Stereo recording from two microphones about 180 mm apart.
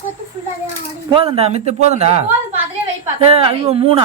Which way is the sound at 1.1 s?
30° right (ahead or behind).